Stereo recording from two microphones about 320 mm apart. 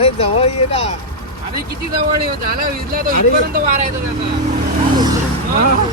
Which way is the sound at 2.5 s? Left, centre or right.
Right.